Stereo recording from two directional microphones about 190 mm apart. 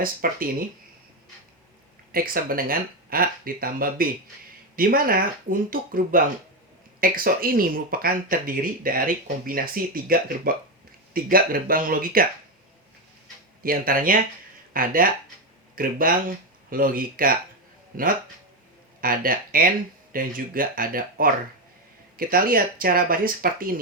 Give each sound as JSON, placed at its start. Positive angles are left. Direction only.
{"t": 0.0, "sound": "speech", "side_deg": -50}
{"t": 2.1, "sound": "speech", "side_deg": -50}
{"t": 13.6, "sound": "speech", "side_deg": -50}